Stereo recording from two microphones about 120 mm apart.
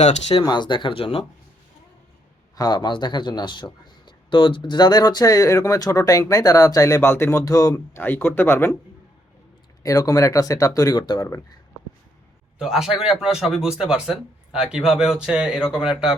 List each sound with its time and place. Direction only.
0.0 s speech: 75° left (ahead or behind)
0.4 s speech: 40° left (ahead or behind)
2.6 s speech: 35° left (ahead or behind)
7.9 s speech: 15° left (ahead or behind)
9.8 s speech: 30° left (ahead or behind)
12.5 s a man's voice: 5° right (ahead or behind)